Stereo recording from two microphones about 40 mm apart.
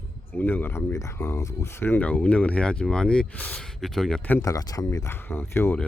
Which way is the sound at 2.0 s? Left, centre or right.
Left.